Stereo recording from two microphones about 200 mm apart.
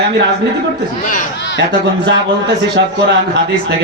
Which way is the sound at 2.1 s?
60° right (ahead or behind).